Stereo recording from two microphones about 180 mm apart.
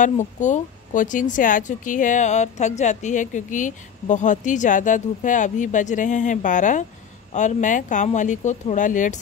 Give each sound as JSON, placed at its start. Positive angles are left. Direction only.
{"t": 0.0, "sound": "a woman's voice", "side_deg": 45}